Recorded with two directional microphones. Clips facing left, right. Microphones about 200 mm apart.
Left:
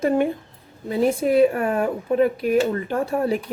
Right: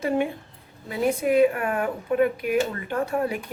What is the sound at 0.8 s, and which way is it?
A woman's voice, 35° left (ahead or behind).